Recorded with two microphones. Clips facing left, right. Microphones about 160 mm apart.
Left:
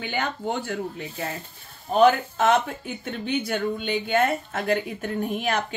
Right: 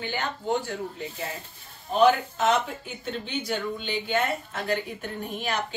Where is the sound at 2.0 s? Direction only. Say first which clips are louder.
Left 2 dB; 55° left (ahead or behind).